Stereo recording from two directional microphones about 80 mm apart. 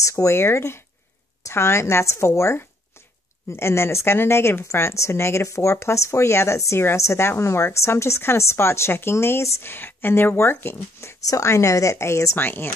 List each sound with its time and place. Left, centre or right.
0.0 s speech: left
11.2 s speech: left